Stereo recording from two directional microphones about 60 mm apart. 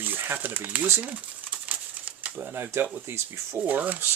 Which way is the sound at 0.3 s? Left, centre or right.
Right.